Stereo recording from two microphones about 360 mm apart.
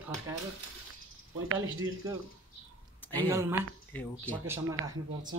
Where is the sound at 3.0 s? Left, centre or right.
Centre.